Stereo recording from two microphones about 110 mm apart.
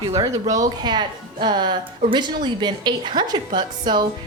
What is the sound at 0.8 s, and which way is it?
A woman's voice, 40° right (ahead or behind).